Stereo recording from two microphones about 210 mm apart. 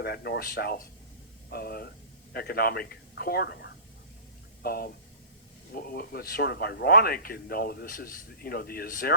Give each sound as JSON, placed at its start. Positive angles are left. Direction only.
{"t": 0.0, "sound": "speech", "side_deg": 50}